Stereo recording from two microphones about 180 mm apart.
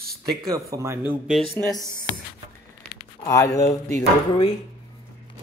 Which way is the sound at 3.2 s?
15° left (ahead or behind).